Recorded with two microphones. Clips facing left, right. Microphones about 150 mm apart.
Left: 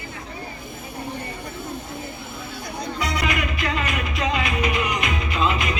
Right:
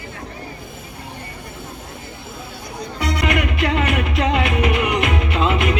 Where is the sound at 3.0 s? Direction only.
65° right (ahead or behind).